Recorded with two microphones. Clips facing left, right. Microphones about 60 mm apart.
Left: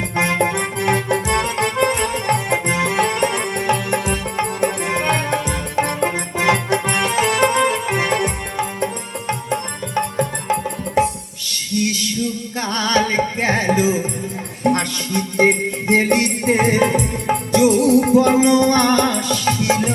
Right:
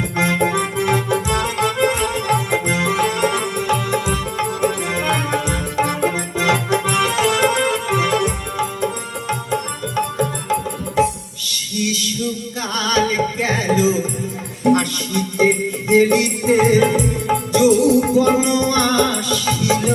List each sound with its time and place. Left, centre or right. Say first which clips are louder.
0.2 s music: right 1 dB; left